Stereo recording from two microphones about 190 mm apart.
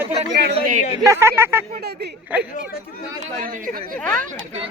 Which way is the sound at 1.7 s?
60° right (ahead or behind).